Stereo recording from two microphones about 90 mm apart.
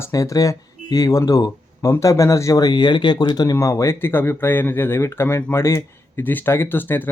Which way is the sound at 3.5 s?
35° left (ahead or behind).